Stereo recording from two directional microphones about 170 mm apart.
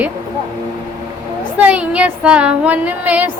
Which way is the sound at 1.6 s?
5° right (ahead or behind).